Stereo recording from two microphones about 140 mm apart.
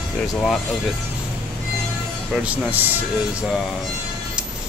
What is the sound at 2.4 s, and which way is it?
Speech, 10° right (ahead or behind).